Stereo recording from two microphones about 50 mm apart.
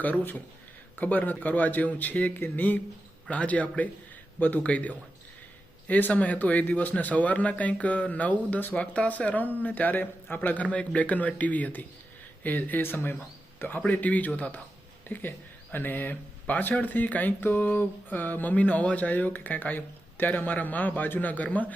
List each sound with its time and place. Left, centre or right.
0.0 s a man's voice: left
15.1 s a man's voice: left